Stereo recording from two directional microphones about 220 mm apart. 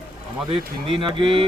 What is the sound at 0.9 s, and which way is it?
Speech, 25° right (ahead or behind).